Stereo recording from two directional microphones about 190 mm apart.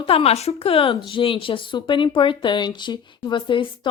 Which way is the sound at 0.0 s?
30° left (ahead or behind).